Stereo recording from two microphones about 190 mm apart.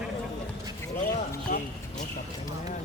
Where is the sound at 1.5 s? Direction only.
45° left (ahead or behind).